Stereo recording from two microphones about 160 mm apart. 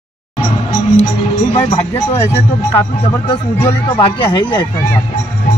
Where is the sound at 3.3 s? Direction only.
30° left (ahead or behind).